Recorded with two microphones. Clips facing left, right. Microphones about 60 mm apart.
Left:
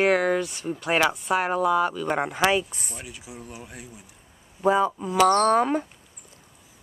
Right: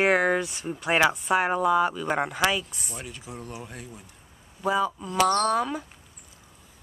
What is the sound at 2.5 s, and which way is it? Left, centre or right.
Speech, left.